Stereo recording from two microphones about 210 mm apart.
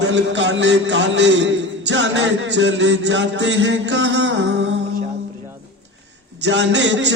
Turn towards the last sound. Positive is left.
turn(degrees=-60)  # may be behind; listen again after turning